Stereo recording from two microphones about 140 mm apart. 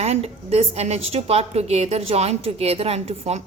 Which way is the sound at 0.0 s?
45° right (ahead or behind).